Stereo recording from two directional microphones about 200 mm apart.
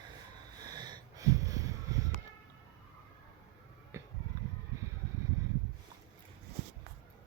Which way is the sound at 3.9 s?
15° right (ahead or behind).